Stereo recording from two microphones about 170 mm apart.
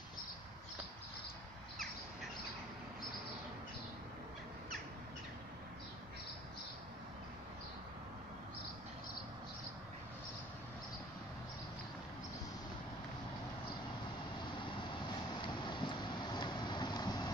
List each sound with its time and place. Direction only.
15.4 s vehicle: 30° left (ahead or behind)